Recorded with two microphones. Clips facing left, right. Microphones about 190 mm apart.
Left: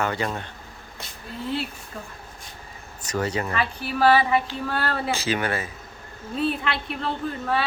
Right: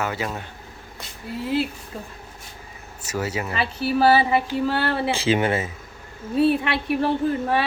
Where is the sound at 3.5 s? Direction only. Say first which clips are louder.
Right 4 dB; 30° right (ahead or behind).